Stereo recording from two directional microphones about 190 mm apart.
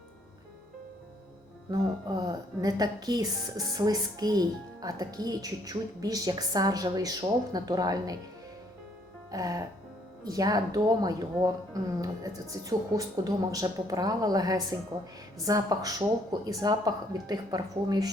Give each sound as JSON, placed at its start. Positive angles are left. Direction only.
{"t": 1.7, "sound": "speech", "side_deg": -20}
{"t": 9.3, "sound": "speech", "side_deg": -20}